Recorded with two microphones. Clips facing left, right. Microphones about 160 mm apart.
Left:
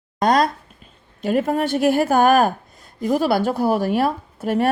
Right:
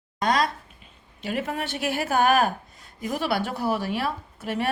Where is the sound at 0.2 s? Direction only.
40° left (ahead or behind).